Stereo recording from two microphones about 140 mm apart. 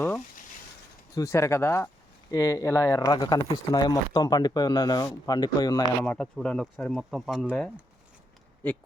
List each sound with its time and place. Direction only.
1.1 s speech: 20° left (ahead or behind)
6.0 s speech: 10° left (ahead or behind)